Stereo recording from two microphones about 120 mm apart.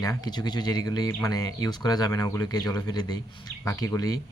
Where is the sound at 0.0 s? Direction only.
30° left (ahead or behind).